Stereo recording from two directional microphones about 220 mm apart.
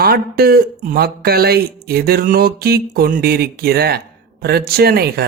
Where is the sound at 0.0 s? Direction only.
45° right (ahead or behind).